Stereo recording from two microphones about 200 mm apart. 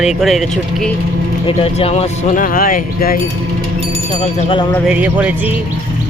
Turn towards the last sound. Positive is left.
turn(degrees=-10)  # may be behind; listen again after turning